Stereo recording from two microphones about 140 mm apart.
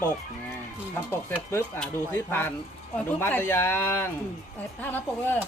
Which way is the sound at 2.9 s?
15° left (ahead or behind).